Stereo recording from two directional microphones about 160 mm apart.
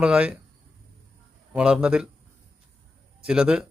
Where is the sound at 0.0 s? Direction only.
5° right (ahead or behind).